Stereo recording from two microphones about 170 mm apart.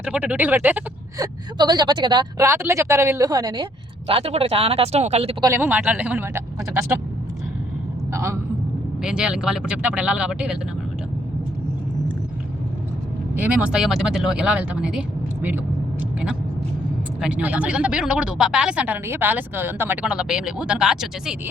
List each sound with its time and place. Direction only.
0.0 s speech: 5° right (ahead or behind)
1.2 s a woman's voice: 25° right (ahead or behind)
5.4 s speech: 15° right (ahead or behind)
8.1 s a man's voice: 15° right (ahead or behind)
9.0 s speech: 5° right (ahead or behind)
13.3 s speech: 10° right (ahead or behind)
17.2 s speech: 5° right (ahead or behind)